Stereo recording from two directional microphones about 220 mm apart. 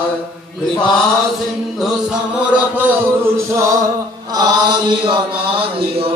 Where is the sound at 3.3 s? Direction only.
15° right (ahead or behind).